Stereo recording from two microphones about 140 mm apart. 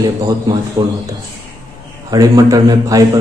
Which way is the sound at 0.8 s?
25° right (ahead or behind).